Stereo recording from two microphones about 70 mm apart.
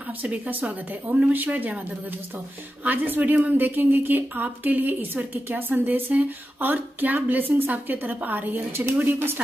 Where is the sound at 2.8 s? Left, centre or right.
Right.